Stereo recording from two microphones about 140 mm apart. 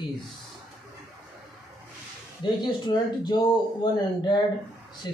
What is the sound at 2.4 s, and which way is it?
Speech, 30° left (ahead or behind).